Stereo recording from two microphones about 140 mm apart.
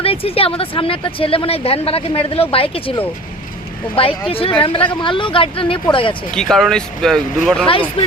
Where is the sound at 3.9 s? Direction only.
40° left (ahead or behind).